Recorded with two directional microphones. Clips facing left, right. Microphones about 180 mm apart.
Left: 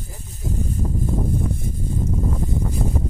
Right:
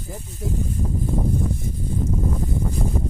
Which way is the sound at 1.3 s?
55° left (ahead or behind).